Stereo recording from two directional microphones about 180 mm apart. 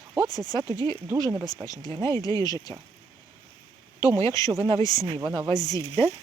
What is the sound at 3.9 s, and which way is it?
Speech, 20° left (ahead or behind).